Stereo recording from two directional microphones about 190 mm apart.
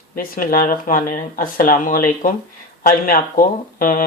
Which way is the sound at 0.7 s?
45° left (ahead or behind).